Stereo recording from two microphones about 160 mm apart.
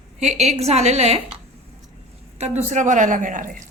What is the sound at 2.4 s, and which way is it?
A woman's voice, 45° right (ahead or behind).